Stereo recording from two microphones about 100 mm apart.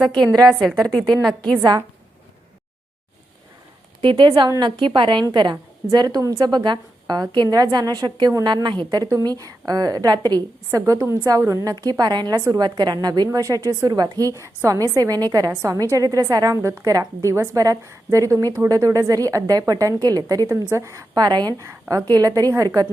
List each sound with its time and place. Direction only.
0.4 s a woman's voice: centre (ahead or behind)
4.0 s a woman's voice: 55° right (ahead or behind); by 21.2 s 30° right (ahead or behind)
21.2 s speech: 45° right (ahead or behind)
21.6 s a woman's voice: 30° right (ahead or behind)